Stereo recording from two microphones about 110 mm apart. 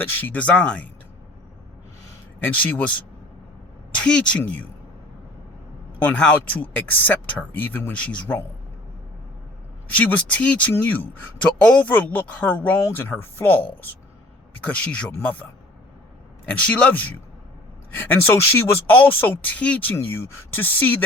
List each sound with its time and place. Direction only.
0.2 s speech: 15° left (ahead or behind)
2.4 s speech: 15° left (ahead or behind)
3.9 s speech: 10° left (ahead or behind)
6.1 s speech: 10° left (ahead or behind)
9.9 s speech: 15° left (ahead or behind)
16.6 s speech: 10° left (ahead or behind)